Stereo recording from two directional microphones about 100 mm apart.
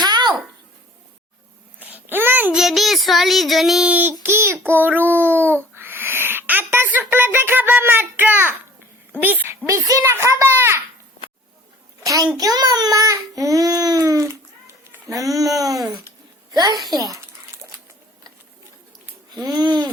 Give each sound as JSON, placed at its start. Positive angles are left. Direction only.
{"t": 0.0, "sound": "babbling", "side_deg": -45}
{"t": 1.8, "sound": "babbling", "side_deg": -20}
{"t": 2.6, "sound": "speech", "side_deg": 0}
{"t": 9.1, "sound": "a sound", "side_deg": -20}
{"t": 9.6, "sound": "speech", "side_deg": -35}
{"t": 10.0, "sound": "a child's voice", "side_deg": -20}
{"t": 12.0, "sound": "a child's voice", "side_deg": -35}
{"t": 19.3, "sound": "a sound", "side_deg": -40}